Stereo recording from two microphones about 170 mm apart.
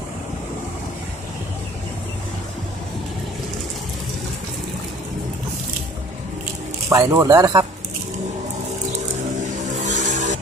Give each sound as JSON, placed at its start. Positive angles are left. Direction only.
{"t": 6.9, "sound": "speech", "side_deg": -20}
{"t": 9.8, "sound": "vehicle", "side_deg": -45}